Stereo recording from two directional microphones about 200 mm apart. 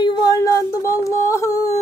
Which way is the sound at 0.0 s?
20° left (ahead or behind).